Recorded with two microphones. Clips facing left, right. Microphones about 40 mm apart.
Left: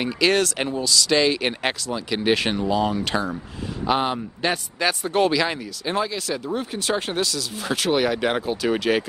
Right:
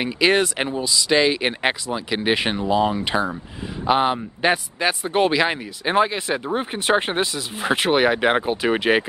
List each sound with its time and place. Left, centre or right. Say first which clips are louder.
0.0 s speech: right 2 dB; centre